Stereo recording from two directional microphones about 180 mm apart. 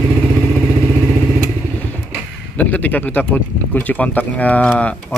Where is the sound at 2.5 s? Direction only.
10° left (ahead or behind).